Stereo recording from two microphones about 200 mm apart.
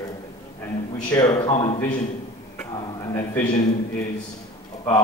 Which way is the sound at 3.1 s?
15° left (ahead or behind).